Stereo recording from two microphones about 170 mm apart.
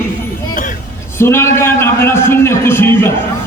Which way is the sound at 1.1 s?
15° left (ahead or behind).